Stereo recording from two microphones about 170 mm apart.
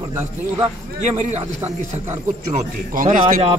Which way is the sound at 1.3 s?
40° right (ahead or behind).